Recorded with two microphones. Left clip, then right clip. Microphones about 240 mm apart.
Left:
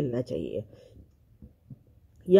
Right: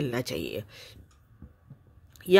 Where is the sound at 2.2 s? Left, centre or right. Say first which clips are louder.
Even; right.